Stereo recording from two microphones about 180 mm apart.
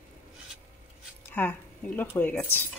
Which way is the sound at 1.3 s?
10° left (ahead or behind).